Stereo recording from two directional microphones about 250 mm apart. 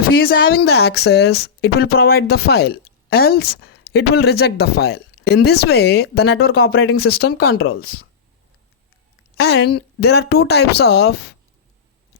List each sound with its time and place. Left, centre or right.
0.2 s speech: left
6.6 s speech: left
6.9 s speech: left
9.7 s speech: left